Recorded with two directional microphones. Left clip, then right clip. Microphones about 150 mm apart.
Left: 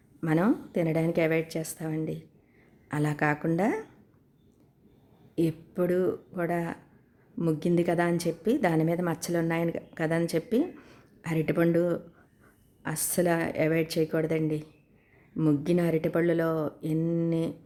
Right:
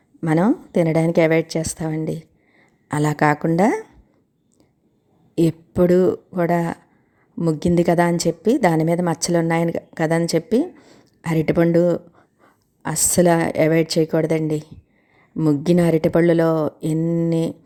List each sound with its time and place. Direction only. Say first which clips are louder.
0.3 s a woman's voice: right 8 dB; 45° right (ahead or behind)
5.3 s a woman's voice: right 9 dB; 45° right (ahead or behind)
10.8 s a sound: right 4 dB; 25° right (ahead or behind)
11.2 s a woman's voice: right 8 dB; 40° right (ahead or behind)
17.0 s a sound: right 7 dB; 25° right (ahead or behind)
17.2 s a woman's voice: right 8 dB; 45° right (ahead or behind)